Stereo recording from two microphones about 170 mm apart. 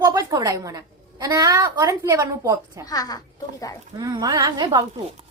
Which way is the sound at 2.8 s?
20° left (ahead or behind).